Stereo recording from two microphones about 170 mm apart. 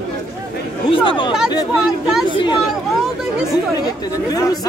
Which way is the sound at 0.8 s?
30° left (ahead or behind).